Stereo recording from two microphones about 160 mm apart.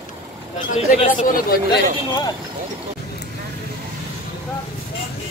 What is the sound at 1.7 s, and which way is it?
Speech, 25° left (ahead or behind).